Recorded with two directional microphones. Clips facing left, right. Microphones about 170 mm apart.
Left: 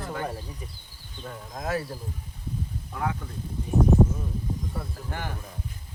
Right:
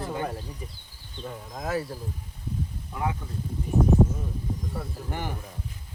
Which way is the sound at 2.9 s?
15° right (ahead or behind).